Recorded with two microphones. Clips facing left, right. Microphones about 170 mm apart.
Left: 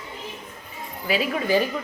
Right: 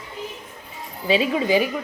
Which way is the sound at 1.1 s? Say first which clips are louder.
Right 3 dB; 20° right (ahead or behind).